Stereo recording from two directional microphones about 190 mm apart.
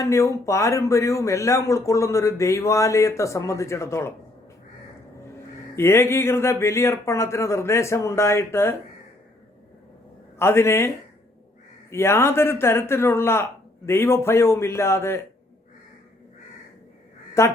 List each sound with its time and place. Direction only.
0.0 s a man's voice: 15° left (ahead or behind)
5.7 s a man's voice: 15° left (ahead or behind)
10.3 s a man's voice: 15° left (ahead or behind)
17.4 s a man's voice: 15° left (ahead or behind)